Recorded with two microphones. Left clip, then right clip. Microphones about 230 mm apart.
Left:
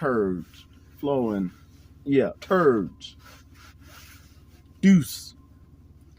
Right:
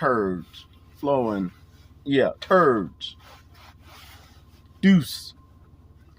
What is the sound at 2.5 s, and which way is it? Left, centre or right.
Speech, right.